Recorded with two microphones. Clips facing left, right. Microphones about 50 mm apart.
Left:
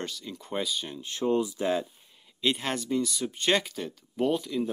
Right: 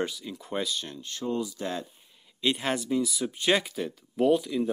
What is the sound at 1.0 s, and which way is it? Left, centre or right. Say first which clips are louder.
Speech: left 5 dB; left.